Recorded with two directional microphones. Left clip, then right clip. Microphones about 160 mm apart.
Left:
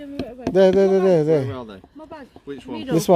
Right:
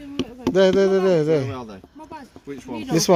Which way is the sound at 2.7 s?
Centre (ahead or behind).